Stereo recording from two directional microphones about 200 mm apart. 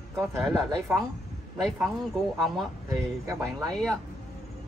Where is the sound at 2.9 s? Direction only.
15° right (ahead or behind).